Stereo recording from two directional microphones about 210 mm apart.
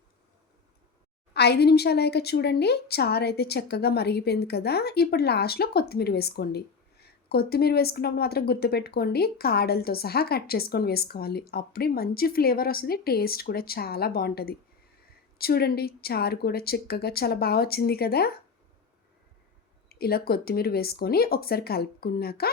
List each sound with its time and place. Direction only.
1.3 s speech: 50° left (ahead or behind)
19.9 s speech: 45° left (ahead or behind)